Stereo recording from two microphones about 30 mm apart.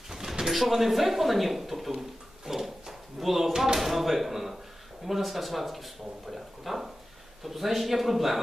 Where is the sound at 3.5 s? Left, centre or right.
Centre.